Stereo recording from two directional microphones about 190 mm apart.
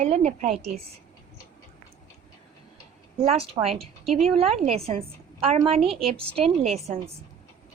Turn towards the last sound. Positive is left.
turn(degrees=-30)  # may be behind; listen again after turning